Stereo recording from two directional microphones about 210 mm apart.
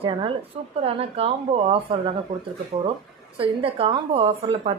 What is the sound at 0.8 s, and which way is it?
Speech, 30° right (ahead or behind).